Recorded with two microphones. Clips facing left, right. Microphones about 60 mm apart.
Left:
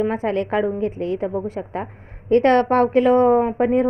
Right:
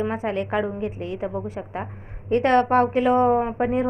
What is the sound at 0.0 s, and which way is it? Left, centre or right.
Speech, left.